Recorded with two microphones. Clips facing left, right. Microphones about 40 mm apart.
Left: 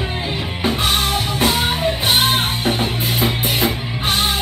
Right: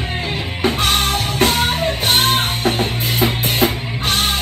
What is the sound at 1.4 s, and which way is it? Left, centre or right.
Music, right.